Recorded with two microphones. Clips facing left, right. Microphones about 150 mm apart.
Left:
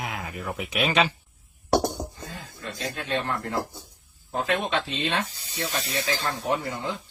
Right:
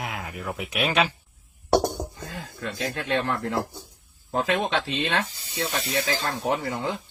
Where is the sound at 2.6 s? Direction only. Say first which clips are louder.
Right 3 dB; 90° right.